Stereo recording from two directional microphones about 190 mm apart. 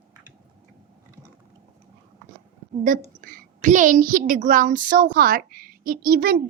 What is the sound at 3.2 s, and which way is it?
A child's voice, 45° right (ahead or behind).